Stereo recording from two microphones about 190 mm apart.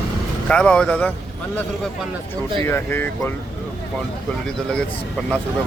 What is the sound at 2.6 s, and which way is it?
Speech, 10° left (ahead or behind).